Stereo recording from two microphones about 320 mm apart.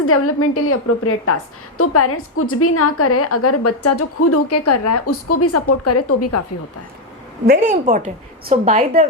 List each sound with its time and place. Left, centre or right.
0.0 s a woman's voice: left
7.4 s a woman's voice: right